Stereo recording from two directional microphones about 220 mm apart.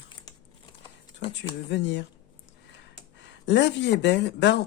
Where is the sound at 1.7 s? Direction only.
55° left (ahead or behind).